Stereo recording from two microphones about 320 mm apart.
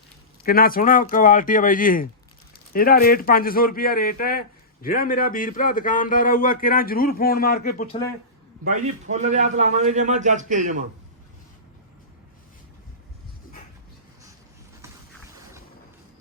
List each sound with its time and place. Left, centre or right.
0.4 s a man's voice: left
8.6 s a man's voice: right